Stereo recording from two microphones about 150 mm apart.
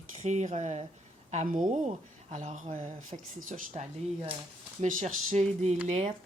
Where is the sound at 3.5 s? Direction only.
55° right (ahead or behind).